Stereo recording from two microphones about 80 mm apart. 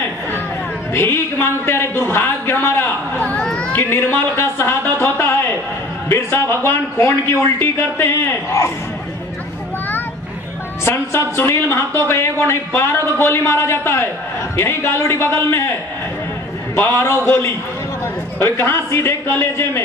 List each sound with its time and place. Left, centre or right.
0.9 s speech: left
3.2 s children playing: centre
3.7 s speech: left
4.9 s a sound: left
6.0 s a man's voice: left
10.9 s speech: left
18.4 s a man's voice: left